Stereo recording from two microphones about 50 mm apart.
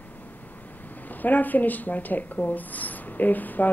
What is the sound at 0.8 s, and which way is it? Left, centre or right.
Speech, left.